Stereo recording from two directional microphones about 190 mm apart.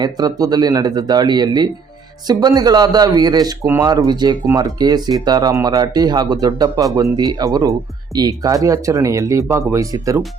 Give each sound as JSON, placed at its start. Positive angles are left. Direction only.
{"t": 0.0, "sound": "speech", "side_deg": -20}